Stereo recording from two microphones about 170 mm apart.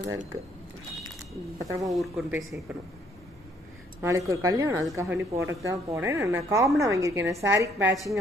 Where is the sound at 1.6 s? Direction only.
20° right (ahead or behind).